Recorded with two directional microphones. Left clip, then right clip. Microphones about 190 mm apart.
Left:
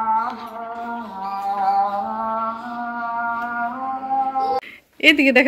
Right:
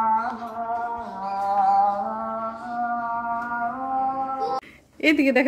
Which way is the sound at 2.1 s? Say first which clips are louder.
Left 5 dB; 40° right (ahead or behind).